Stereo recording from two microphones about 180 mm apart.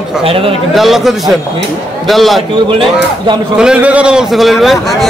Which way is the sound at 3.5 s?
5° right (ahead or behind).